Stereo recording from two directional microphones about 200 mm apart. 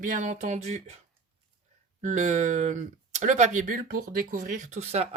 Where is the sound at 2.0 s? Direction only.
35° right (ahead or behind).